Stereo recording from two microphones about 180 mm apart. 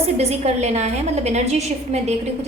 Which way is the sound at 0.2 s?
35° right (ahead or behind).